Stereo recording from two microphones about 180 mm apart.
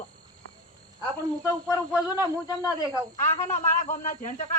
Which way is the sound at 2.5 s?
20° left (ahead or behind).